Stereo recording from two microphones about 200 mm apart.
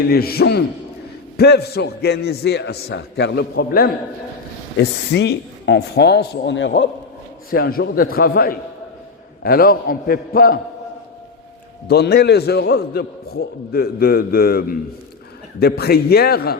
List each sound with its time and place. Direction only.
0.1 s a man's voice: 50° left (ahead or behind)
7.5 s a man's voice: 50° left (ahead or behind)
11.9 s a man's voice: 55° left (ahead or behind)